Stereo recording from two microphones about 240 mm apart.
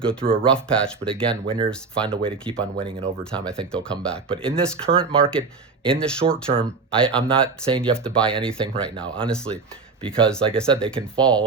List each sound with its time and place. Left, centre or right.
0.0 s speech: centre
1.5 s speech: right
1.7 s speech: centre
2.7 s speech: right
3.3 s speech: centre